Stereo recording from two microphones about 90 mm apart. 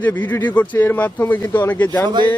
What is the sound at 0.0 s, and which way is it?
Speech, 20° left (ahead or behind).